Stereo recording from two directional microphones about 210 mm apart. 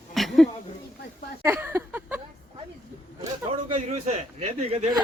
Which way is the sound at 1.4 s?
10° right (ahead or behind).